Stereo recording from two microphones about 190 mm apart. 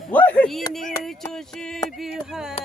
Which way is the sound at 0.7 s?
Centre (ahead or behind).